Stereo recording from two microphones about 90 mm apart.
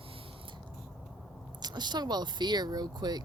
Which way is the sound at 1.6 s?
50° right (ahead or behind).